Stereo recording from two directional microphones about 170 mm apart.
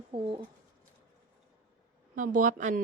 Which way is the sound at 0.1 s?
30° right (ahead or behind).